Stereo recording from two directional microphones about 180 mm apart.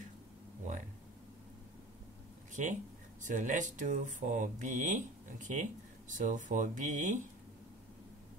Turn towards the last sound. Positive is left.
turn(degrees=-45)  # may be behind; listen again after turning